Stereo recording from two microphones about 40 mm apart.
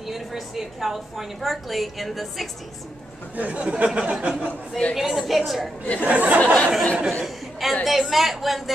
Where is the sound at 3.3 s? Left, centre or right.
Right.